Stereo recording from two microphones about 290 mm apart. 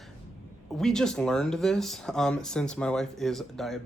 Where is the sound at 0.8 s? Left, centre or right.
Centre.